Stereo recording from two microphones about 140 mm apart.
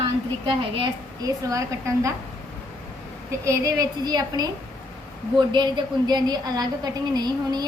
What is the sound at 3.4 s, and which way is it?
A woman's voice, 25° right (ahead or behind).